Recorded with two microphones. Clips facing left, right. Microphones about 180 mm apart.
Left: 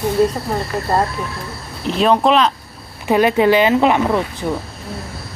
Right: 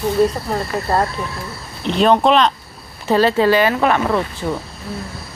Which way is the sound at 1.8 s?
Centre (ahead or behind).